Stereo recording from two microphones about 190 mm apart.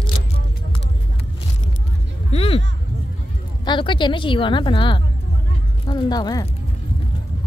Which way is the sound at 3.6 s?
25° left (ahead or behind).